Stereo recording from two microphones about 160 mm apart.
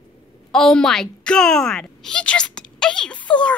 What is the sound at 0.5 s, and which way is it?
A woman's voice, 5° left (ahead or behind).